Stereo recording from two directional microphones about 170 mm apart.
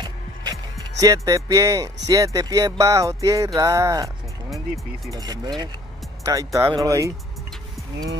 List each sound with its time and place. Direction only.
0.0 s music: 25° right (ahead or behind)
5.1 s music: 20° right (ahead or behind)